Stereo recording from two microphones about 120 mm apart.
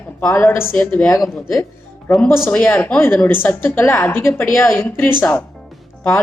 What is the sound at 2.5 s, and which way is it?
A woman's voice, 15° left (ahead or behind).